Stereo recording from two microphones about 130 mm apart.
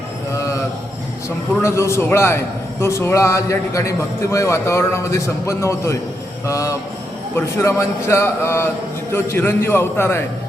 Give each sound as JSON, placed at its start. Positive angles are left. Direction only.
{"t": 1.6, "sound": "a man's voice", "side_deg": 20}